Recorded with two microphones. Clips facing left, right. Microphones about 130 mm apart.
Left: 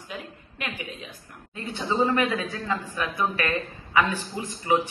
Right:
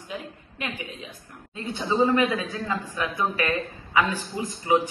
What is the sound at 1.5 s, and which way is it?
A man's voice, 15° right (ahead or behind).